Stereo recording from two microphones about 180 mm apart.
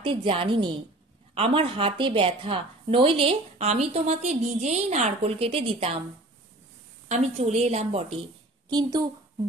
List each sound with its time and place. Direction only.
0.0 s a woman's voice: 30° right (ahead or behind)
7.1 s a woman's voice: 35° right (ahead or behind)
8.6 s a woman's voice: 25° right (ahead or behind)